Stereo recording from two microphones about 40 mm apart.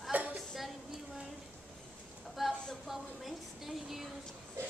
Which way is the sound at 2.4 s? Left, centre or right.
Centre.